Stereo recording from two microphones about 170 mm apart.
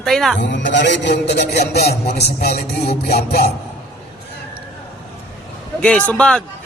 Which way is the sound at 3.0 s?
70° left (ahead or behind).